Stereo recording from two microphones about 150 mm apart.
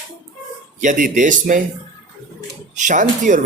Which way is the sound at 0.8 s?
60° right (ahead or behind).